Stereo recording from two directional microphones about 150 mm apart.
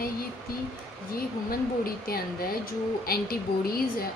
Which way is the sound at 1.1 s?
85° left.